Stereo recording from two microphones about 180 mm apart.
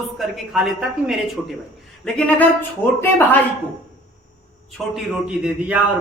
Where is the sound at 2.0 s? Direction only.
10° left (ahead or behind).